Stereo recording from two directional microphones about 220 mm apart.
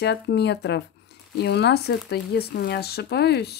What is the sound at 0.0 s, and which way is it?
Speech, 50° left (ahead or behind).